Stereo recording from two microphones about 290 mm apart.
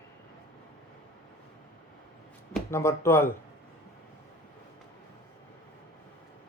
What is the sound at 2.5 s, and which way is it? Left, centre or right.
Speech, centre.